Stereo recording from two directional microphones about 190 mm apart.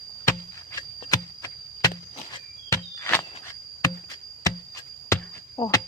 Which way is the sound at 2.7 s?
15° left (ahead or behind).